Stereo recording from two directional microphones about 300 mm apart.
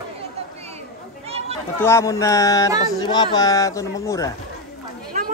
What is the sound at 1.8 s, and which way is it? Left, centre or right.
Speech, centre.